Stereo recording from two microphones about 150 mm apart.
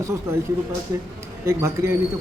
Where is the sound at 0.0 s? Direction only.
20° right (ahead or behind).